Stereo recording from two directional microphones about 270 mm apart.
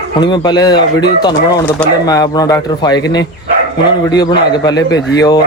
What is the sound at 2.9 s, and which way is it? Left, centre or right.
Speech, left.